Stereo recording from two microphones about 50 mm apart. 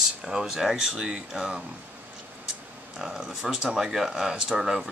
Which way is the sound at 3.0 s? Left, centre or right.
Centre.